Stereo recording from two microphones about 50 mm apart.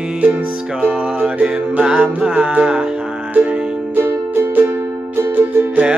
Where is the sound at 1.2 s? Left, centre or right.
Right.